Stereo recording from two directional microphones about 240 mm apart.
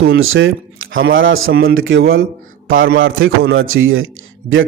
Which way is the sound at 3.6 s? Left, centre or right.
Right.